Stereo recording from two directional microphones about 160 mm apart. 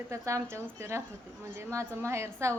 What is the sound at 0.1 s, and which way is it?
A woman's voice, 20° right (ahead or behind).